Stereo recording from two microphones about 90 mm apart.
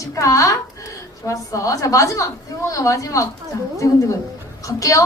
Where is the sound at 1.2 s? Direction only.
35° left (ahead or behind).